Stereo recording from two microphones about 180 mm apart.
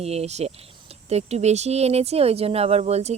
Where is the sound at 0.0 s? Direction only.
35° right (ahead or behind).